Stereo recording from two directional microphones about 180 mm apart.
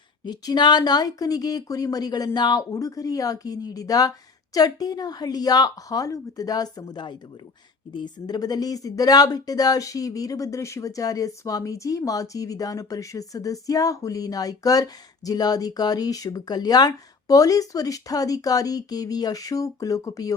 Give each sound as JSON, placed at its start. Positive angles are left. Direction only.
{"t": 0.3, "sound": "speech", "side_deg": 25}